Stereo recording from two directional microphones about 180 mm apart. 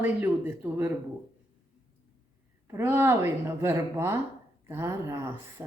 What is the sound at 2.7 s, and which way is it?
A woman's voice, 15° right (ahead or behind).